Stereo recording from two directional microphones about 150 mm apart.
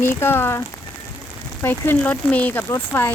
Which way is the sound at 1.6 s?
15° left (ahead or behind).